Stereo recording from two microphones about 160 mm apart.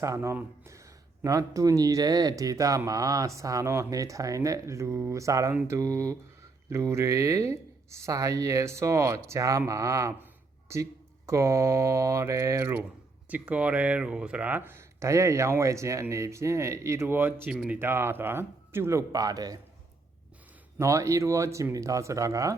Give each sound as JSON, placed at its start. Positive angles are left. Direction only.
{"t": 0.0, "sound": "speech", "side_deg": -20}
{"t": 20.7, "sound": "speech", "side_deg": -20}